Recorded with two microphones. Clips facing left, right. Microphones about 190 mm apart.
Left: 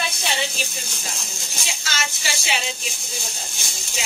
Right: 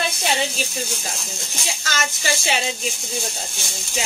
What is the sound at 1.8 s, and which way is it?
Speech, 45° right (ahead or behind).